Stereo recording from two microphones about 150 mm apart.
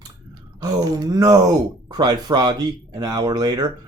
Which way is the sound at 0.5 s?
25° right (ahead or behind).